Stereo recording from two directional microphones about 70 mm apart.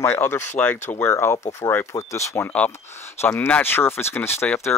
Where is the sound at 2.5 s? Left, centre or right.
Left.